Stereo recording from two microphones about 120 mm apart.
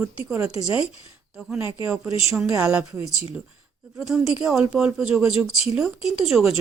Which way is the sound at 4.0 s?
Centre (ahead or behind).